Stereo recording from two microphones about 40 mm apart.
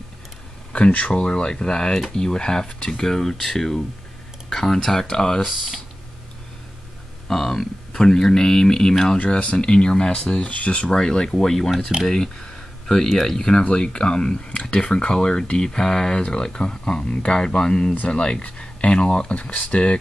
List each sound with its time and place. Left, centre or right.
0.7 s speech: left
3.0 s speech: centre
5.4 s speech: centre
7.2 s speech: centre
9.2 s speech: left; by 13.4 s centre
13.4 s speech: left